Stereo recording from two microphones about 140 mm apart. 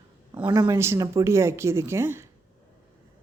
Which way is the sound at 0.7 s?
20° right (ahead or behind).